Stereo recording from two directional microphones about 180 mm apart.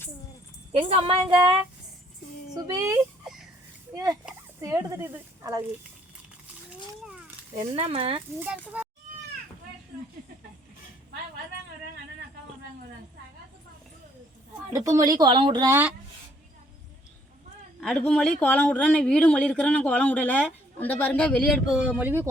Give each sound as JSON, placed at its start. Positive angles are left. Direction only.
{"t": 0.7, "sound": "speech", "side_deg": -30}
{"t": 2.6, "sound": "speech", "side_deg": -15}
{"t": 7.5, "sound": "speech", "side_deg": -35}
{"t": 8.4, "sound": "speech", "side_deg": -5}
{"t": 14.7, "sound": "speech", "side_deg": -20}
{"t": 15.7, "sound": "speech", "side_deg": -10}
{"t": 17.7, "sound": "speech", "side_deg": 5}